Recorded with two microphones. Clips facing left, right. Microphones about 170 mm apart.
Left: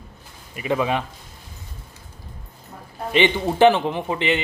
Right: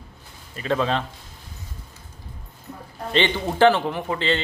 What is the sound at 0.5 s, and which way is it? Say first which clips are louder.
Speech: left 1 dB; 15° left (ahead or behind).